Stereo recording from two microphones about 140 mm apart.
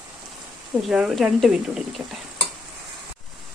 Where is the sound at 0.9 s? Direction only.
5° right (ahead or behind).